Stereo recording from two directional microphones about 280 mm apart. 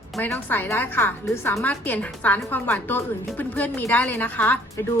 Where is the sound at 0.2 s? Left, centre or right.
Centre.